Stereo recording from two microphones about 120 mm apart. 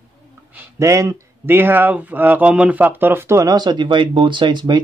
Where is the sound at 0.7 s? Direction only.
25° right (ahead or behind).